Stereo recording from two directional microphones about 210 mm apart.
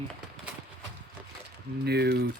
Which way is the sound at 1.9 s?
50° right (ahead or behind).